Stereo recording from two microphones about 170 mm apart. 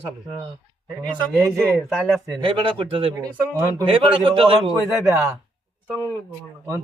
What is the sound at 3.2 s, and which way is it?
Speech, 15° right (ahead or behind).